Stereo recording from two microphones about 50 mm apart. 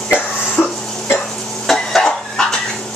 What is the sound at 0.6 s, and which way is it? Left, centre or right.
Cough, left.